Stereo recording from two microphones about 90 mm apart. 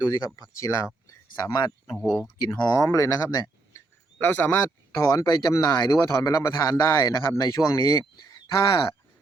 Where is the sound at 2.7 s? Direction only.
35° left (ahead or behind).